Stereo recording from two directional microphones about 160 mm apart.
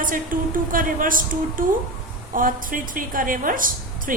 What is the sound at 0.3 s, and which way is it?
A woman's voice, 60° right (ahead or behind).